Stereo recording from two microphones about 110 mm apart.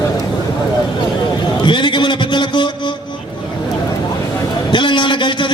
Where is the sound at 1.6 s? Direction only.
45° left (ahead or behind).